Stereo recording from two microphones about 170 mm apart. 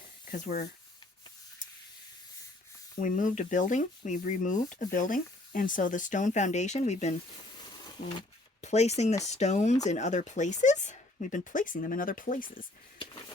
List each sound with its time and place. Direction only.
0.3 s speech: 50° left (ahead or behind)
3.0 s speech: 50° left (ahead or behind)
7.8 s a sound: 25° left (ahead or behind)
8.6 s speech: 40° left (ahead or behind)